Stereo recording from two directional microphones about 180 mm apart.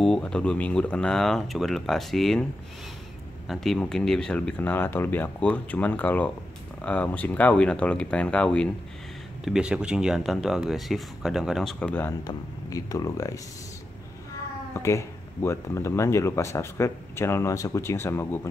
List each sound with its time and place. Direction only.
0.0 s speech: 5° left (ahead or behind)
3.4 s speech: centre (ahead or behind); by 13.4 s 20° left (ahead or behind)
14.7 s speech: 15° left (ahead or behind)